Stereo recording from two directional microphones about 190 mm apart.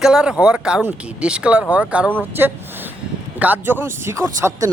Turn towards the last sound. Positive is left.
turn(degrees=-15)  # may be behind; listen again after turning